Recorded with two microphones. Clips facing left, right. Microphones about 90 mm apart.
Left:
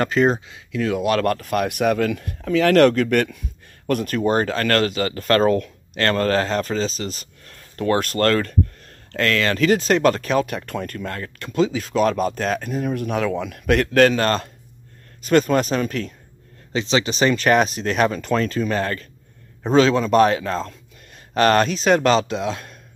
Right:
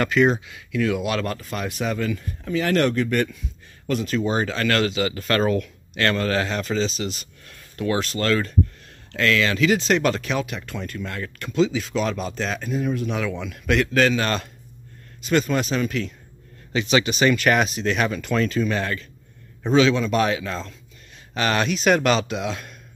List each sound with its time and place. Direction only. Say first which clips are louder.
0.0 s speech: left 1 dB; 35° left (ahead or behind)
1.2 s speech: left 7 dB; 60° left (ahead or behind)
11.2 s speech: even; 35° left (ahead or behind)
11.5 s speech: left 2 dB; 45° left (ahead or behind)
16.7 s speech: even; 30° left (ahead or behind)